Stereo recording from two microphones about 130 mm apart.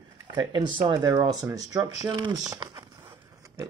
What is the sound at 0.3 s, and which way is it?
Speech, 35° right (ahead or behind).